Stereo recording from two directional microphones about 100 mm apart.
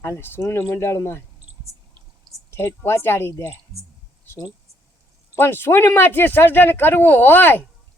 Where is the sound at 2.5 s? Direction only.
25° left (ahead or behind).